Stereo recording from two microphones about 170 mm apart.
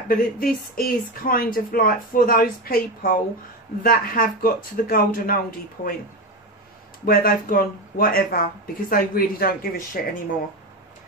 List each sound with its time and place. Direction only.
0.1 s speech: 55° left (ahead or behind)
7.1 s speech: 60° left (ahead or behind)